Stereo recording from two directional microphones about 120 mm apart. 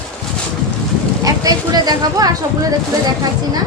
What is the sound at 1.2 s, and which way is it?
Speech, 30° right (ahead or behind).